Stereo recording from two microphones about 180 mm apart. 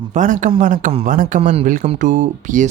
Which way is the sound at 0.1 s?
45° right (ahead or behind).